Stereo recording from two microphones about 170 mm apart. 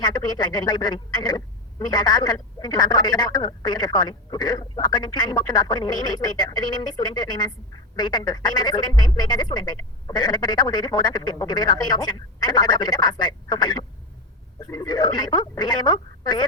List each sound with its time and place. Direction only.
0.0 s speech: 25° left (ahead or behind)